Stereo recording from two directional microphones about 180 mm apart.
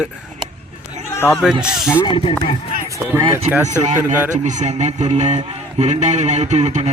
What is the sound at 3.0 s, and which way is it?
Speech, 10° right (ahead or behind).